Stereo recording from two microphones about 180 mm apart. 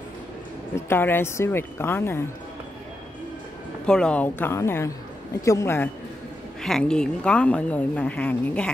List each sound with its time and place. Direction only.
0.7 s speech: 15° left (ahead or behind)
3.8 s speech: 5° left (ahead or behind)
6.6 s speech: 5° left (ahead or behind)